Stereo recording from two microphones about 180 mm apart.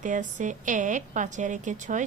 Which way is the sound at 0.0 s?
45° right (ahead or behind).